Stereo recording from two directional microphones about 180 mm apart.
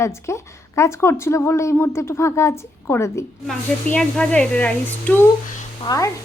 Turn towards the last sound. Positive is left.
turn(degrees=20)  # may be behind; listen again after turning